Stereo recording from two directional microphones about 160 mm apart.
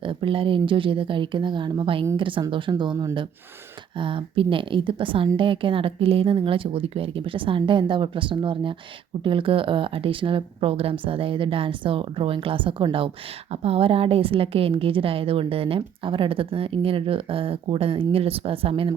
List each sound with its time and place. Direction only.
0.0 s a woman's voice: 30° right (ahead or behind)